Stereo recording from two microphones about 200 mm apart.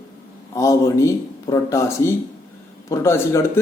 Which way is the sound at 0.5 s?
15° left (ahead or behind).